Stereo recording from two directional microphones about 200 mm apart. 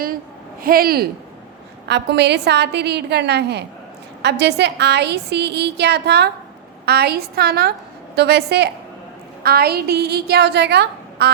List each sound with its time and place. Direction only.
0.6 s a woman's voice: 50° right (ahead or behind)